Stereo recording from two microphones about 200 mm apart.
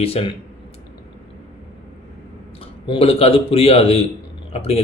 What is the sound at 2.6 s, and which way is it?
A man's voice, 30° left (ahead or behind).